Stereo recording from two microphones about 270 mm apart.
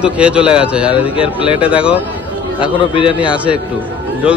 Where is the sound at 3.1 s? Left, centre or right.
Centre.